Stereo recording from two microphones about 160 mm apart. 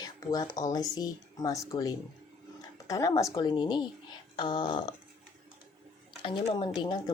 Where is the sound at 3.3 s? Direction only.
30° left (ahead or behind).